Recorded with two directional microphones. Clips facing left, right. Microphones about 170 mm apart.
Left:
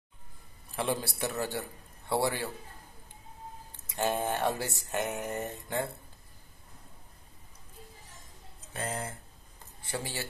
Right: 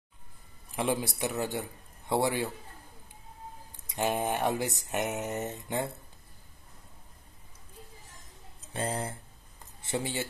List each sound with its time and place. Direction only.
0.7 s a man's voice: 15° right (ahead or behind)
3.8 s a sound: 15° right (ahead or behind)
8.7 s speech: 30° right (ahead or behind)